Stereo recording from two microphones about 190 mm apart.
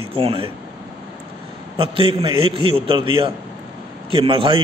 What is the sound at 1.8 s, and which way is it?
A man's voice, 30° right (ahead or behind).